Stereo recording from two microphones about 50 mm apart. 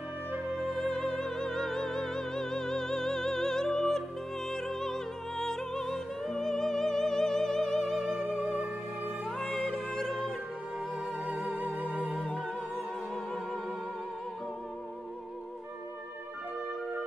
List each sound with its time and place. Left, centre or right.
0.6 s music: centre
8.4 s music: centre
9.2 s music: centre
11.5 s music: right
11.8 s music: centre